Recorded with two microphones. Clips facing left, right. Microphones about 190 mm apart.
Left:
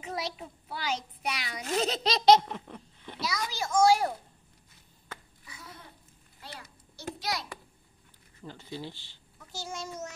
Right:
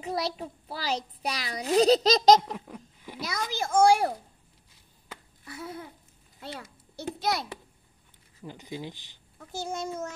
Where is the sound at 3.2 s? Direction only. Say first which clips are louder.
Right 2 dB; 50° right (ahead or behind).